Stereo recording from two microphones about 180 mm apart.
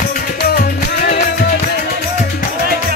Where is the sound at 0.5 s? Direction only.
60° left (ahead or behind).